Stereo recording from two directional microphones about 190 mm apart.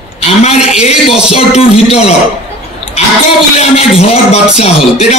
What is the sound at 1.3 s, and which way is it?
Music, 30° left (ahead or behind).